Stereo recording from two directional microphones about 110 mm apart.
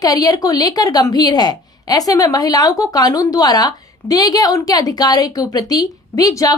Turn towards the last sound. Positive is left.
turn(degrees=30)  # may be behind; listen again after turning